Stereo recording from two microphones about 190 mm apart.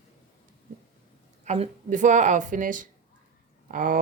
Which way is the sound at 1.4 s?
35° right (ahead or behind).